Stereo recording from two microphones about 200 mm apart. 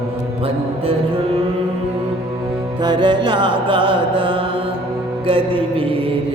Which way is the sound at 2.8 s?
25° right (ahead or behind).